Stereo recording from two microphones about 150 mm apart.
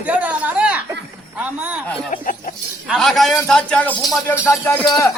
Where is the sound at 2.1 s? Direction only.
65° left (ahead or behind).